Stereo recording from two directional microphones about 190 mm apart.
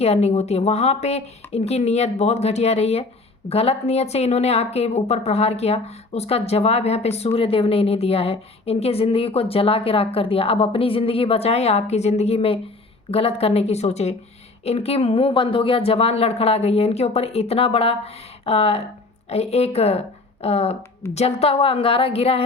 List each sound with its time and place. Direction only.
0.0 s a woman's voice: 35° left (ahead or behind)